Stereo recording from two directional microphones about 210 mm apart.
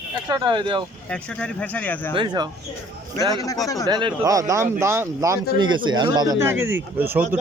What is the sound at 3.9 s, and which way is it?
Speech, 20° right (ahead or behind).